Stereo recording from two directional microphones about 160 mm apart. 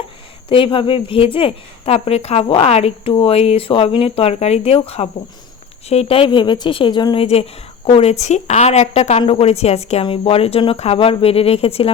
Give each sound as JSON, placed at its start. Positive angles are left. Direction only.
{"t": 0.4, "sound": "a woman's voice", "side_deg": 35}